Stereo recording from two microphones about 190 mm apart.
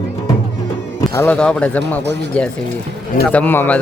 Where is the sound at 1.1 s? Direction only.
10° left (ahead or behind).